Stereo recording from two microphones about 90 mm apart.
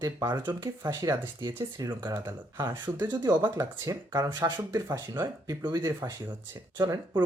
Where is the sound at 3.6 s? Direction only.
40° right (ahead or behind).